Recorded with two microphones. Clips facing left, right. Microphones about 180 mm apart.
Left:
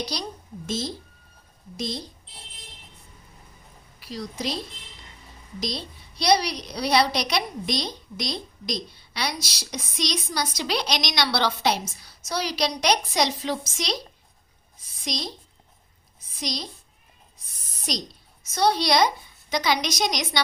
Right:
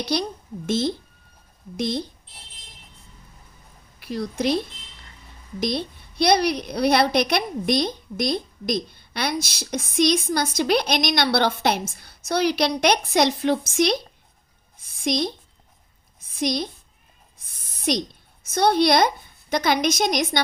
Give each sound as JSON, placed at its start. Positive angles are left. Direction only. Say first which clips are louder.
{"t": 0.0, "sound": "a woman's voice", "louder": "right 6 dB", "side_deg": -60}
{"t": 4.0, "sound": "a woman's voice", "louder": "right 7 dB", "side_deg": -55}
{"t": 14.8, "sound": "a sound", "louder": "right 9 dB", "side_deg": -55}
{"t": 16.3, "sound": "a woman's voice", "louder": "right 8 dB", "side_deg": -55}